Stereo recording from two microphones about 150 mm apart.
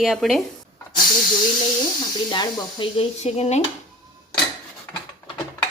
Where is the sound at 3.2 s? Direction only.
45° left (ahead or behind).